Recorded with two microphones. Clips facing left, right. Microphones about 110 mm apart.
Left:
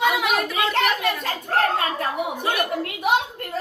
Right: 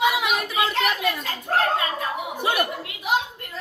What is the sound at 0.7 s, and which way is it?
Speech, 65° left (ahead or behind).